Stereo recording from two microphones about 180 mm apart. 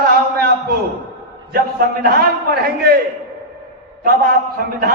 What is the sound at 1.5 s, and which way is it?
Speech, 55° right (ahead or behind).